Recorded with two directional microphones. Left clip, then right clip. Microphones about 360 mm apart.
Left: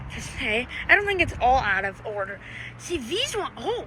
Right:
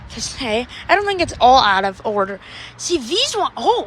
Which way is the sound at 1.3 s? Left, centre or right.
Right.